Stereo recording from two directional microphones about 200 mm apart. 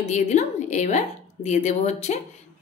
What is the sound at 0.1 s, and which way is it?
A woman's voice, 35° left (ahead or behind).